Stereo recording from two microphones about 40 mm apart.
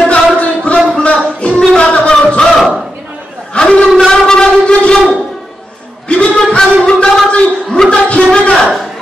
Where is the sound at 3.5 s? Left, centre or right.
Left.